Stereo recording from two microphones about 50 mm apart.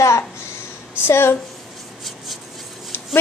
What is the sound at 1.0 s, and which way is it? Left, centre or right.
Speech, left.